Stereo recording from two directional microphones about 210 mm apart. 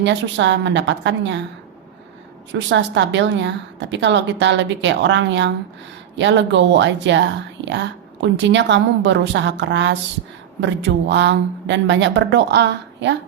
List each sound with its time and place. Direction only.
0.0 s speech: 60° right (ahead or behind)
2.5 s speech: 60° right (ahead or behind)